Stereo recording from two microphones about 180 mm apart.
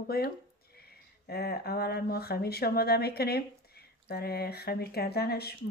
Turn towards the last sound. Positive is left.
turn(degrees=60)  # may be behind; listen again after turning